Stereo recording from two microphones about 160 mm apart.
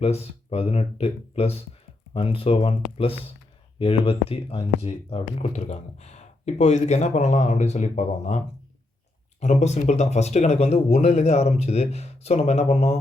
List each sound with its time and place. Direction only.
0.0 s speech: 40° left (ahead or behind)
9.4 s speech: 45° left (ahead or behind)